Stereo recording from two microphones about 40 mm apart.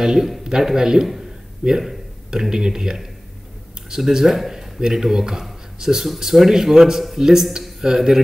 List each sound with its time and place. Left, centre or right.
0.0 s a man's voice: centre